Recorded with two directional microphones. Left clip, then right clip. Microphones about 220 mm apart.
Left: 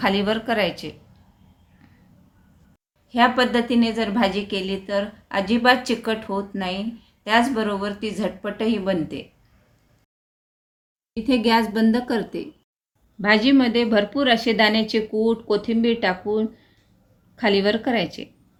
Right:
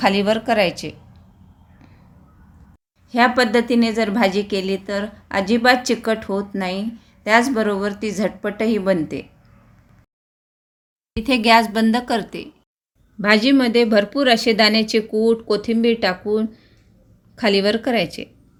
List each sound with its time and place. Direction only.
0.0 s a woman's voice: 20° right (ahead or behind)
3.1 s a woman's voice: 25° right (ahead or behind)
11.1 s a woman's voice: 40° right (ahead or behind)